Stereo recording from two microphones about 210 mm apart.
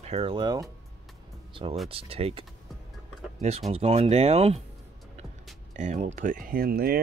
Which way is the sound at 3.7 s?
30° right (ahead or behind).